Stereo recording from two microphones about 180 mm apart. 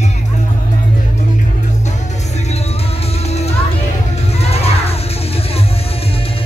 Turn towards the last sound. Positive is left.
turn(degrees=35)  # may be behind; listen again after turning